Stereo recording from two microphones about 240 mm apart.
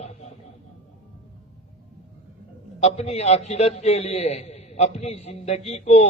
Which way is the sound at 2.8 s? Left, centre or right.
Left.